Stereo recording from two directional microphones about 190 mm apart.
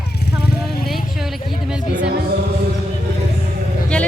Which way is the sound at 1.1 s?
Centre (ahead or behind).